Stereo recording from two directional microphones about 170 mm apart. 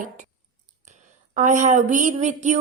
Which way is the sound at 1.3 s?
45° right (ahead or behind).